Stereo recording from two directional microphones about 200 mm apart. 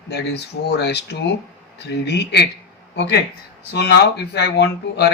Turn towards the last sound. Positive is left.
turn(degrees=55)  # may be behind; listen again after turning